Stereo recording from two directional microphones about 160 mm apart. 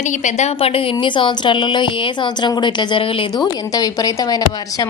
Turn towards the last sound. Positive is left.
turn(degrees=25)  # may be behind; listen again after turning